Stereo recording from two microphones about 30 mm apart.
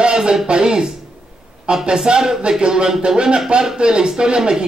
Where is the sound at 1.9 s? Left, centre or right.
Right.